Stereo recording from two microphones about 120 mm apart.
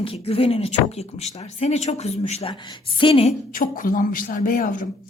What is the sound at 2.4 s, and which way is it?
Speech, 45° left (ahead or behind).